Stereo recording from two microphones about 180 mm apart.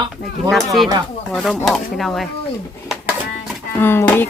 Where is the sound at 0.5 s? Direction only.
Centre (ahead or behind).